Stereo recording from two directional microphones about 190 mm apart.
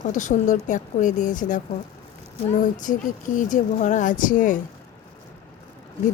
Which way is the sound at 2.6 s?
45° left (ahead or behind).